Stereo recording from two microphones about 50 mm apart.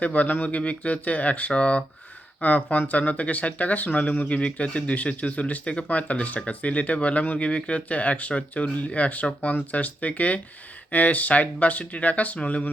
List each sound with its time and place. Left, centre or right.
0.0 s speech: left